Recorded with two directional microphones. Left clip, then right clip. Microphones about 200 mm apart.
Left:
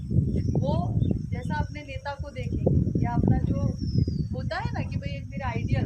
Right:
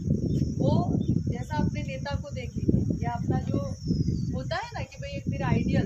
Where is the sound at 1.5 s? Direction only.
15° left (ahead or behind).